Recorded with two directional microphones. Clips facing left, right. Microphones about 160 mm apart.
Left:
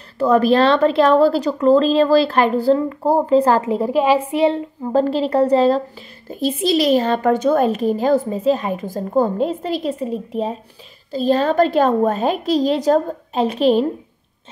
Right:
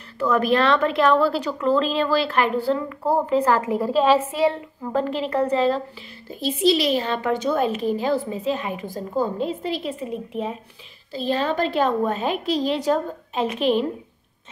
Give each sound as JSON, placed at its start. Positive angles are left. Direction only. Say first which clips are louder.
{"t": 0.2, "sound": "a woman's voice", "louder": "left 6 dB", "side_deg": 35}